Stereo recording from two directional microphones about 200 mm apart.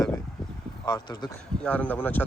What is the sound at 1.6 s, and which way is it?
Speech, 5° left (ahead or behind).